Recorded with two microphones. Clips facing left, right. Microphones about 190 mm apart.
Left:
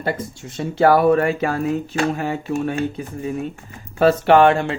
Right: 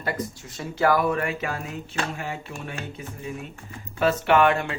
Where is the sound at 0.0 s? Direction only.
25° left (ahead or behind).